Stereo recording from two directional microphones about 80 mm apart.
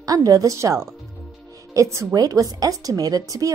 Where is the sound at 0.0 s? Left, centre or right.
Right.